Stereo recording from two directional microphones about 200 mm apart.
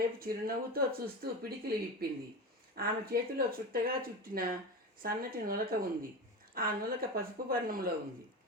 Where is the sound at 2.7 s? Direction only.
50° right (ahead or behind).